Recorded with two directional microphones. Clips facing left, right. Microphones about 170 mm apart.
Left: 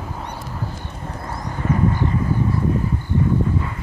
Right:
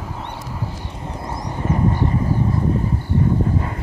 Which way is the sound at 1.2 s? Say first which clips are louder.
Right 1 dB; 15° right (ahead or behind).